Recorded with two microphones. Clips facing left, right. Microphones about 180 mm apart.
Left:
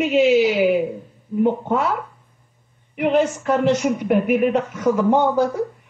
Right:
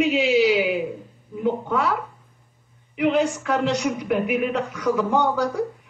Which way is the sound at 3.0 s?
50° left (ahead or behind).